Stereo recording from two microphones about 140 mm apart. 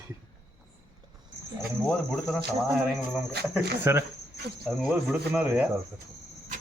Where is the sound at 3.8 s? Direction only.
15° right (ahead or behind).